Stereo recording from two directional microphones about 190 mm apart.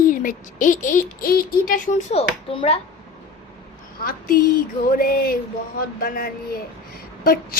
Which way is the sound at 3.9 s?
50° left (ahead or behind).